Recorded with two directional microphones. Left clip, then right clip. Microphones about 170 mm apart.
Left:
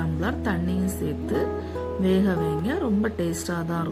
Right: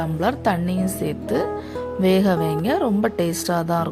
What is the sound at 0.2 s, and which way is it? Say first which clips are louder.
Speech: right 8 dB; 50° right (ahead or behind).